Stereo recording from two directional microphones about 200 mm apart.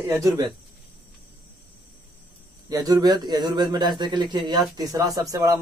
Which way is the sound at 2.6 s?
20° right (ahead or behind).